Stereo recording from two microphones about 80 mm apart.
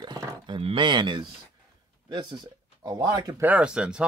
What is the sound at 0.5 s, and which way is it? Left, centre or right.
Speech, right.